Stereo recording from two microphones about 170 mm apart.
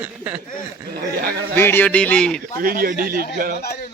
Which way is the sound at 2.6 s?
55° right (ahead or behind).